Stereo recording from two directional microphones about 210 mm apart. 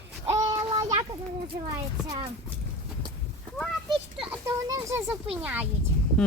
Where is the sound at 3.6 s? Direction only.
Centre (ahead or behind).